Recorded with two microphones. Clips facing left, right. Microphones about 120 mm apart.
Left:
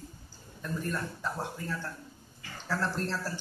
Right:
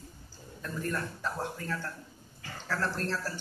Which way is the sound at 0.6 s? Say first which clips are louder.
Even; 15° left (ahead or behind).